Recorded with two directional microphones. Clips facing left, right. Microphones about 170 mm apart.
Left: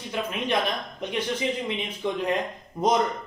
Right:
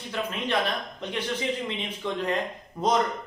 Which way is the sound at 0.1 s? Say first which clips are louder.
Left 2 dB; 15° left (ahead or behind).